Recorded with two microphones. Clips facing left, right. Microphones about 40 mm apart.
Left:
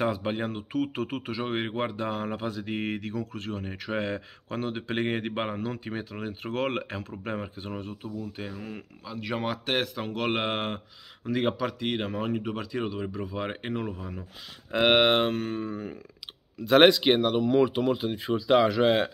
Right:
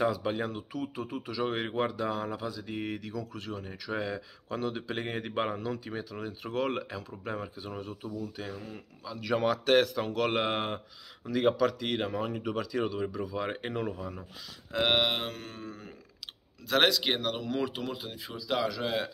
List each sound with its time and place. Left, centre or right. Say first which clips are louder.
0.0 s speech: left 1 dB; left
0.7 s speech: left 9 dB; left
1.3 s speech: right 1 dB; left
9.4 s speech: right 5 dB; centre
10.2 s speech: left 2 dB; left
12.4 s speech: even; centre
14.7 s speech: left 5 dB; left
15.0 s speech: left 9 dB; left
17.1 s speech: left 9 dB; centre
17.7 s speech: left 10 dB; left